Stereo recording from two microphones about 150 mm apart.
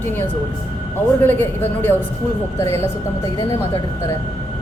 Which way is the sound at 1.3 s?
15° left (ahead or behind).